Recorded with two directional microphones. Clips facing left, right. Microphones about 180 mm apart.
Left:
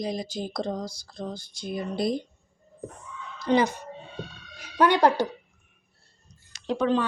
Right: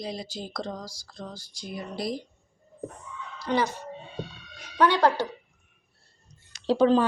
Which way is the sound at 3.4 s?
20° left (ahead or behind).